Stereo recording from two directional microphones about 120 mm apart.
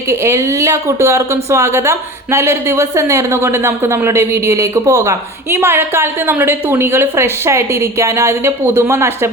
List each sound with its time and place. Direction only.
0.1 s speech: 25° right (ahead or behind)